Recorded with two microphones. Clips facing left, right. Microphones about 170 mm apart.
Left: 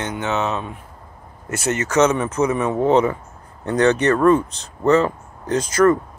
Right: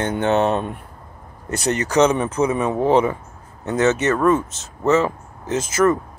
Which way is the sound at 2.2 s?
30° right (ahead or behind).